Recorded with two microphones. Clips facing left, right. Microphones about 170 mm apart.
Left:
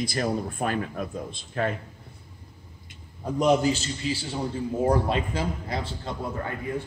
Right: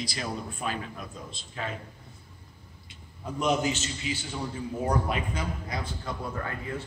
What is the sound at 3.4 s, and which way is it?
A man's voice, 35° left (ahead or behind).